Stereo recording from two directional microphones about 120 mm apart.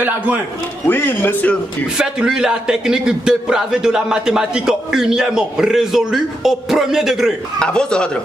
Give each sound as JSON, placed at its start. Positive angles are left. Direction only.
{"t": 0.8, "sound": "speech", "side_deg": 15}
{"t": 2.0, "sound": "a man's voice", "side_deg": -5}
{"t": 7.5, "sound": "speech", "side_deg": 5}